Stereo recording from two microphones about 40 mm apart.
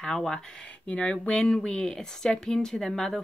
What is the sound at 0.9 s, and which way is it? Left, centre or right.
Speech, left.